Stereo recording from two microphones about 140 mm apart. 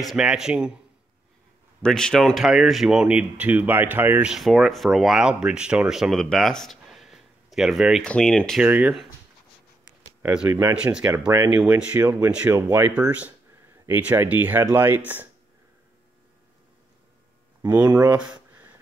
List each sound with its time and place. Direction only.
0.0 s speech: 5° right (ahead or behind)
1.8 s speech: 5° left (ahead or behind); by 4.3 s 15° right (ahead or behind)
4.3 s speech: centre (ahead or behind)
8.6 s speech: 10° right (ahead or behind)
10.2 s speech: 10° right (ahead or behind)
10.5 s speech: 20° right (ahead or behind)
10.8 s speech: 5° right (ahead or behind)
17.6 s speech: 10° right (ahead or behind)
18.5 s beatboxing: 15° right (ahead or behind)